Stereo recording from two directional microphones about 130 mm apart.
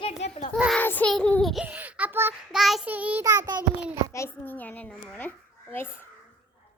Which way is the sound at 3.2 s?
25° right (ahead or behind).